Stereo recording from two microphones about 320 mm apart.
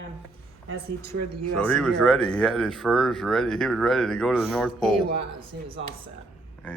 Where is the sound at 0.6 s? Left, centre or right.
Right.